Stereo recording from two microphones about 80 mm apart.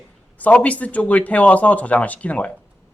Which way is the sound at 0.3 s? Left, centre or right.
Centre.